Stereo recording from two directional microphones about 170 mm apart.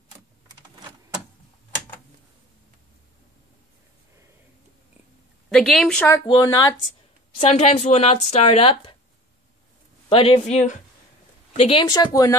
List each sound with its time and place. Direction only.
5.5 s a woman's voice: centre (ahead or behind)
6.0 s speech: 20° left (ahead or behind)
7.3 s speech: 35° left (ahead or behind)
10.0 s speech: 35° left (ahead or behind)
11.9 s speech: 20° left (ahead or behind)